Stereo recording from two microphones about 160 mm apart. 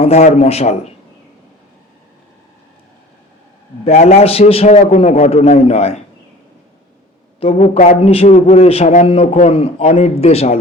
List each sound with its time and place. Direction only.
0.0 s a man's voice: 40° left (ahead or behind)
3.8 s a man's voice: 40° left (ahead or behind)
7.3 s a man's voice: 35° left (ahead or behind)